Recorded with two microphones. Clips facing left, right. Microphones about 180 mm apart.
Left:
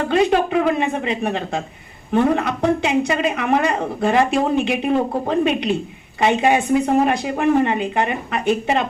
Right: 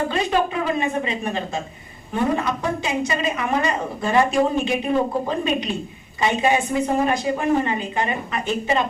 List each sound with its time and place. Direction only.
0.0 s a woman's voice: 60° left (ahead or behind)